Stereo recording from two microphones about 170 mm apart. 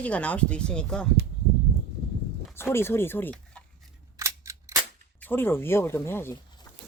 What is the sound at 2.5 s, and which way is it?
Speech, 15° left (ahead or behind).